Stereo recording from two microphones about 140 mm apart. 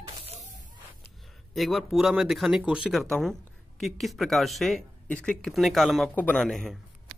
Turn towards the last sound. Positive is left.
turn(degrees=0)  # may be behind; listen again after turning